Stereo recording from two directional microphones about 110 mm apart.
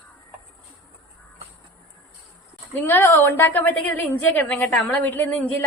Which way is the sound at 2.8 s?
20° left (ahead or behind).